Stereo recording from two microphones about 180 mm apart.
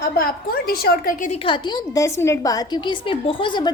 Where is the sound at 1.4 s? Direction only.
25° left (ahead or behind).